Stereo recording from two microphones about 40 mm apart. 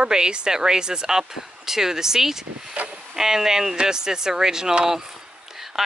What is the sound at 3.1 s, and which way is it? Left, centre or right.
Speech, centre.